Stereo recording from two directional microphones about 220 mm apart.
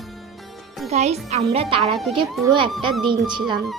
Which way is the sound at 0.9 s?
30° right (ahead or behind).